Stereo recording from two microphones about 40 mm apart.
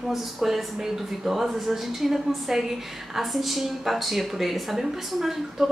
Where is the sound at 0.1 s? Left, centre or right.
Centre.